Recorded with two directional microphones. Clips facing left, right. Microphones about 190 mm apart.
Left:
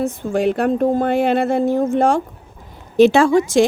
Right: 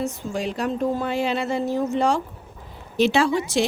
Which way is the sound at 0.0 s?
55° left (ahead or behind).